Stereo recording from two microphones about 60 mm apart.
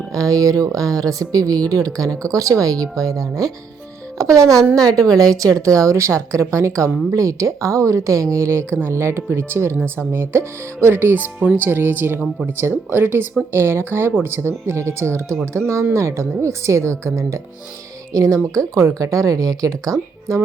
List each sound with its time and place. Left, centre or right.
0.1 s speech: right
2.2 s speech: right
4.2 s a woman's voice: right
18.5 s speech: right